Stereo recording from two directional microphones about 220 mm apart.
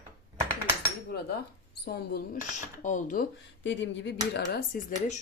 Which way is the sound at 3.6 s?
55° left (ahead or behind).